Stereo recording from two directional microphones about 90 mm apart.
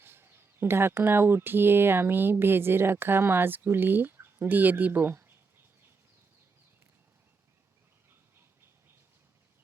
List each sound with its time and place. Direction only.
0.0 s speech: 25° right (ahead or behind)